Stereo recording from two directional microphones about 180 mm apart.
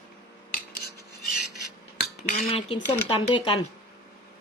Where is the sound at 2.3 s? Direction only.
35° left (ahead or behind).